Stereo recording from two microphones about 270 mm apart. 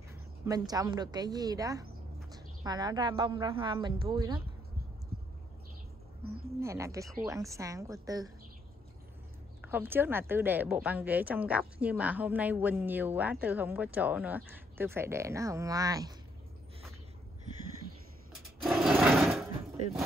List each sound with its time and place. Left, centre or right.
0.1 s a woman's voice: centre
6.6 s a woman's voice: centre
9.6 s a woman's voice: centre
18.3 s a sound: centre